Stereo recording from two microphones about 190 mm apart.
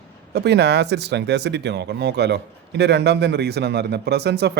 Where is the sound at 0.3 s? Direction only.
60° right (ahead or behind).